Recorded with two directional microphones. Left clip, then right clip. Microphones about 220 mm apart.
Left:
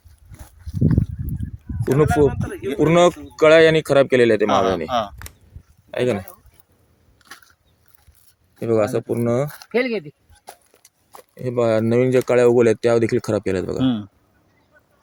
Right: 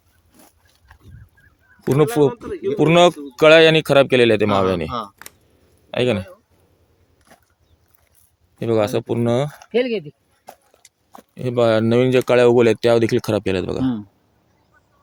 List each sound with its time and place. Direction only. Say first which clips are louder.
1.8 s speech: right 1 dB; centre (ahead or behind)
2.3 s speech: right 3 dB; 45° left (ahead or behind)
2.7 s speech: right 1 dB; centre (ahead or behind)
4.9 s speech: left 5 dB; 50° left (ahead or behind)
5.1 s a sound: even; centre (ahead or behind)
5.9 s speech: right 2 dB; 5° right (ahead or behind)
7.2 s a sound: left 9 dB; 50° left (ahead or behind)
8.5 s speech: even; 5° right (ahead or behind)
9.7 s speech: right 1 dB; 15° left (ahead or behind)
10.4 s a sound: even; 40° left (ahead or behind)
11.3 s speech: right 2 dB; 5° right (ahead or behind)